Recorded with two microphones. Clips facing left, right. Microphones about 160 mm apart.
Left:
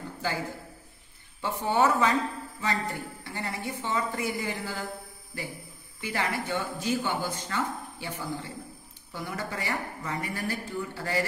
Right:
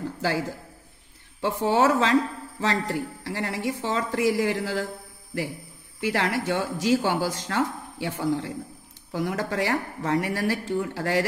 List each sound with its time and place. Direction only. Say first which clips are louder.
1.4 s speech: right 4 dB; 80° right
5.9 s speech: right 6 dB; 70° right (ahead or behind)